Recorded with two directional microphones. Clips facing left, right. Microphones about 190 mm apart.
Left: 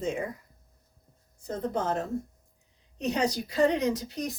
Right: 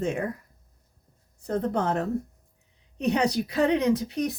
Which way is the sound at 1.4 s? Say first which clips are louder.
Right 4 dB; 65° right (ahead or behind).